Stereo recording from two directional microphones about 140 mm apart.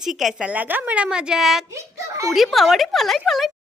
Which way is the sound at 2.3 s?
Centre (ahead or behind).